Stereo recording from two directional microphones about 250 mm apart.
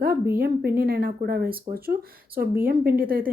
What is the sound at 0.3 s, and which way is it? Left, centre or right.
A woman's voice, right.